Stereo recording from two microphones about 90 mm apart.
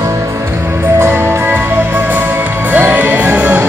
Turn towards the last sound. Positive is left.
turn(degrees=-15)  # may be behind; listen again after turning